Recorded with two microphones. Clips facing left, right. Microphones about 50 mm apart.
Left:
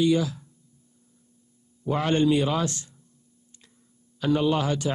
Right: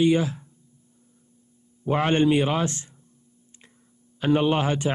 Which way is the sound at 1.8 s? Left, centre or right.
Right.